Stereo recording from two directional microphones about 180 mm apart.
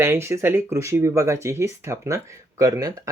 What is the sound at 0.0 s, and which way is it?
Speech, 15° right (ahead or behind).